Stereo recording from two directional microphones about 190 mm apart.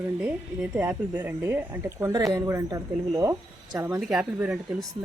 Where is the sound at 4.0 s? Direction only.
5° right (ahead or behind).